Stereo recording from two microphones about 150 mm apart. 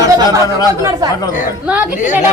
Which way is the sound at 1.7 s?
10° right (ahead or behind).